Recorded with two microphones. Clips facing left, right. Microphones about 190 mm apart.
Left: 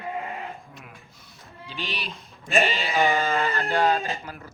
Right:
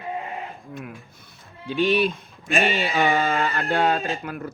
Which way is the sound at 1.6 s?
55° right (ahead or behind).